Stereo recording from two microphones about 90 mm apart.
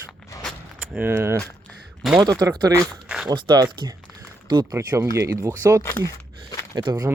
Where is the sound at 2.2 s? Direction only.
45° right (ahead or behind).